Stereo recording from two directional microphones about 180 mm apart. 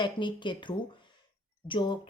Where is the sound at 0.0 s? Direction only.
25° left (ahead or behind).